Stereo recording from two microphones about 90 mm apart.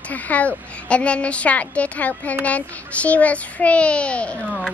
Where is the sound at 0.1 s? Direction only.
15° left (ahead or behind).